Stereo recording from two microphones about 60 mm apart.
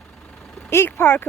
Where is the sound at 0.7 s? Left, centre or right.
Left.